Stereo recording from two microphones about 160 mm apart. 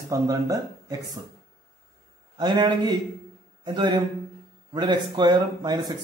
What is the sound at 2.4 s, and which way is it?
Speech, 25° right (ahead or behind).